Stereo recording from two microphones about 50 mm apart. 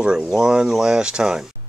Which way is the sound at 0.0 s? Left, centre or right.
Centre.